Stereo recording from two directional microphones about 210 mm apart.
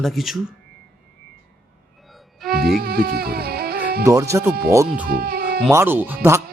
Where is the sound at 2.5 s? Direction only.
45° right (ahead or behind).